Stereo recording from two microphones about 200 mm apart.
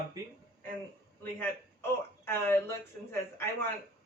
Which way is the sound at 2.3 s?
10° left (ahead or behind).